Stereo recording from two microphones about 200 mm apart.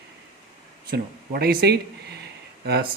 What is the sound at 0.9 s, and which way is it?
Speech, 50° right (ahead or behind).